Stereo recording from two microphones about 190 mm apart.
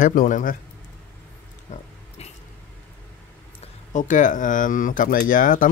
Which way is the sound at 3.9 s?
45° left (ahead or behind).